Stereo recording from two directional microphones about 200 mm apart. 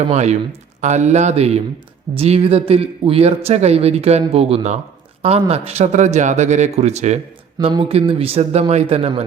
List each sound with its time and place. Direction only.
0.1 s a man's voice: 35° right (ahead or behind)